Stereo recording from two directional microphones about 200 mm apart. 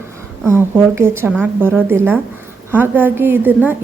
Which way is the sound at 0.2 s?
15° right (ahead or behind).